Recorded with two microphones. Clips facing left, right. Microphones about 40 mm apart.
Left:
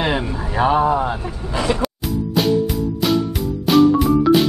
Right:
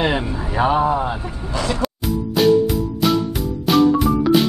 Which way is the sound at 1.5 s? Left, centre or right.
Centre.